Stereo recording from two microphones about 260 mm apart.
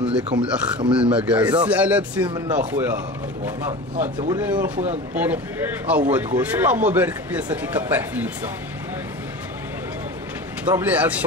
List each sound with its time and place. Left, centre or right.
0.0 s speech: centre
2.2 s speech: centre
2.5 s speech: centre
4.3 s speech: centre
10.6 s speech: centre